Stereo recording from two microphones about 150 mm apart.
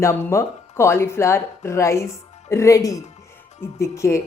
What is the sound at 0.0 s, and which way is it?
Speech, 20° left (ahead or behind).